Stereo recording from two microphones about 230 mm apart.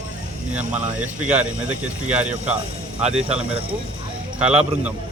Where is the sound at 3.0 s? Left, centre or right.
Centre.